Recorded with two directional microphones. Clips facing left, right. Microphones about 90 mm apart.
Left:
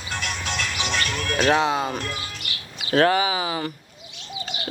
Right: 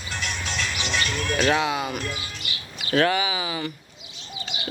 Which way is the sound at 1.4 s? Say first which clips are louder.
Left 4 dB; 30° left (ahead or behind).